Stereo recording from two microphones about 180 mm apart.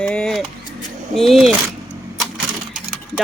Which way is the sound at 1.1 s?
Centre (ahead or behind).